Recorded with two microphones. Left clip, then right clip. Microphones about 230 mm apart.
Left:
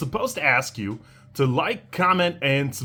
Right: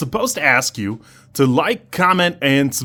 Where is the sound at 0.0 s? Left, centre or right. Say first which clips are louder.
Right 5 dB; right.